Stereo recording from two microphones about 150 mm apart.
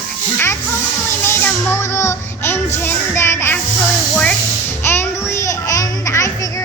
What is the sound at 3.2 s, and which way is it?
Music, 15° left (ahead or behind).